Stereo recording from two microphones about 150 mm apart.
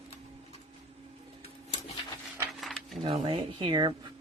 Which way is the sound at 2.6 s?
Centre (ahead or behind).